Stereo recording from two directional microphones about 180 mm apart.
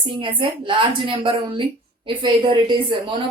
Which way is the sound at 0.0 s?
30° right (ahead or behind).